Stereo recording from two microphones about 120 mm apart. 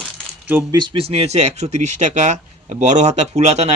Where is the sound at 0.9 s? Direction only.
55° right (ahead or behind).